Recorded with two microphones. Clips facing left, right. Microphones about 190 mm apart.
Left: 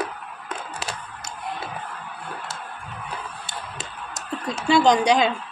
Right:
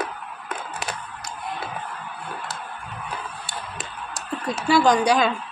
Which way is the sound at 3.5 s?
20° left (ahead or behind).